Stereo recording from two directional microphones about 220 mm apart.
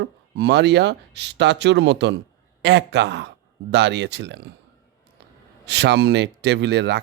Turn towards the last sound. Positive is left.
turn(degrees=-50)  # may be behind; listen again after turning